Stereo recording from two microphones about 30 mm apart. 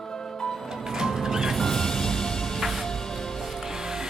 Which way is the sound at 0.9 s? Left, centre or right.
Centre.